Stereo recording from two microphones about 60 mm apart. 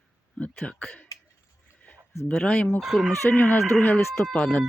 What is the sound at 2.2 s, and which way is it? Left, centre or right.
Speech, centre.